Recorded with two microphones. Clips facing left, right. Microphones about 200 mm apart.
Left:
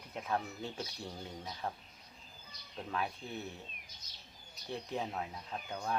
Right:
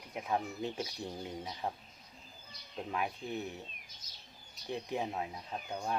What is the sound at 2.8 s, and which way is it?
Speech, 15° right (ahead or behind).